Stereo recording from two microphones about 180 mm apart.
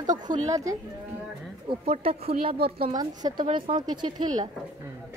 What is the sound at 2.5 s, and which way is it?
Speech, 60° right (ahead or behind).